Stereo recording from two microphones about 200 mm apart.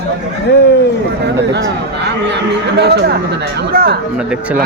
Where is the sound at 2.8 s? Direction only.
55° right (ahead or behind).